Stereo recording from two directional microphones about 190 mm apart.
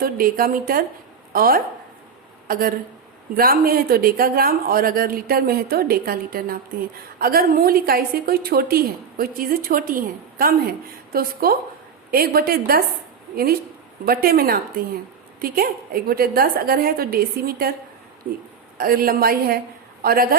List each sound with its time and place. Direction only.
0.0 s a woman's voice: 50° right (ahead or behind)
18.8 s a woman's voice: 50° right (ahead or behind)